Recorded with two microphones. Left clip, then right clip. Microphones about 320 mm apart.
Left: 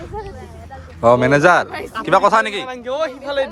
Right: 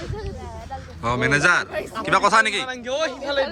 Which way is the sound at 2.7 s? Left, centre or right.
Centre.